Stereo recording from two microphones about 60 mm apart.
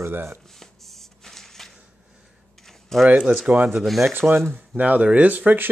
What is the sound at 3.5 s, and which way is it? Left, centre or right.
Speech, right.